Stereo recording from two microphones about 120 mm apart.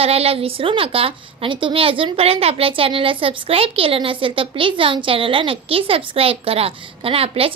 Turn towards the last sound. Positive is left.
turn(degrees=-55)  # may be behind; listen again after turning